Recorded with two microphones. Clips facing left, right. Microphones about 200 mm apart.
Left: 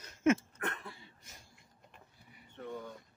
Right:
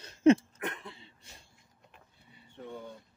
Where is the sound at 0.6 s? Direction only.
20° right (ahead or behind).